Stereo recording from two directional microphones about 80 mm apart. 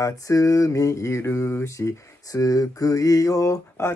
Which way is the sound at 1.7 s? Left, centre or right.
Left.